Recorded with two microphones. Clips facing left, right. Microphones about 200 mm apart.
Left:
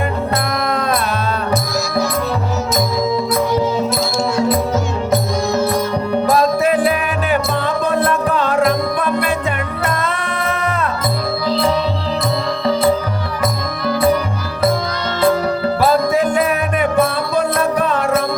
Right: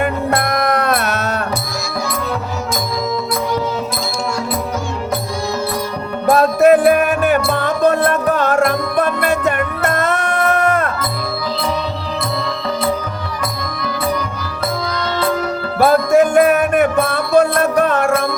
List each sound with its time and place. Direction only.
0.9 s music: 70° right (ahead or behind)
6.3 s music: 55° right (ahead or behind)
15.8 s music: 55° right (ahead or behind)